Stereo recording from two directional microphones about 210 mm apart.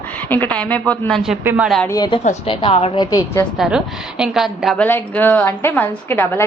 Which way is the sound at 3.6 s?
5° right (ahead or behind).